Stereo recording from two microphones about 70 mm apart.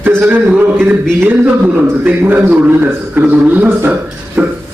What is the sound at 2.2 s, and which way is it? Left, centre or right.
Speech, right.